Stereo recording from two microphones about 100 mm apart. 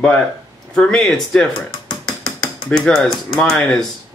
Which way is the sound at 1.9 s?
35° left (ahead or behind).